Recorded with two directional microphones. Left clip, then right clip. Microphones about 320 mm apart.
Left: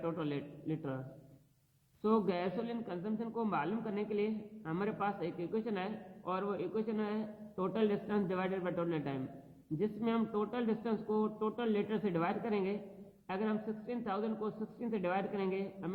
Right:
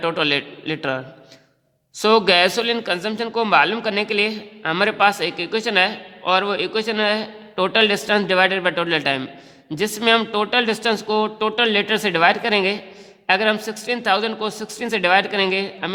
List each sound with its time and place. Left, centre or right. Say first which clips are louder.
0.0 s a man's voice: right 19 dB; right
2.0 s a man's voice: right 19 dB; right